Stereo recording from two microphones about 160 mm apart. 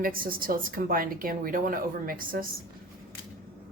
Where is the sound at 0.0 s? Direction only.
65° right (ahead or behind).